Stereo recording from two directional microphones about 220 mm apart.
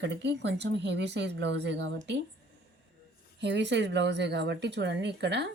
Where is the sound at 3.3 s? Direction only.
55° right (ahead or behind).